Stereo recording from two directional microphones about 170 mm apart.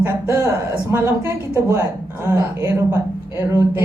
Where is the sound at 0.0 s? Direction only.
15° right (ahead or behind).